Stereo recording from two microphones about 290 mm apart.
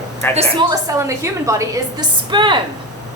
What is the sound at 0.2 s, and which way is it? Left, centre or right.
Speech, centre.